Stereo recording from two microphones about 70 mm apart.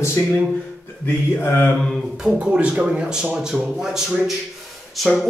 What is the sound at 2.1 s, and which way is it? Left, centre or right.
Speech, centre.